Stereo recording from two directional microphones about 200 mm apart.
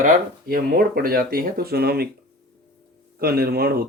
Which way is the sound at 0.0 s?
45° right (ahead or behind).